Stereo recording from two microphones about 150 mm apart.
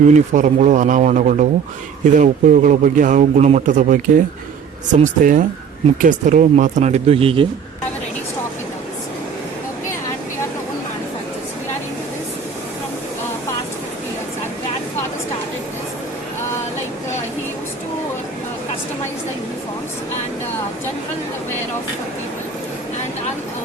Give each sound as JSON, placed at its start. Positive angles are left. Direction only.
{"t": 0.1, "sound": "a man's voice", "side_deg": -55}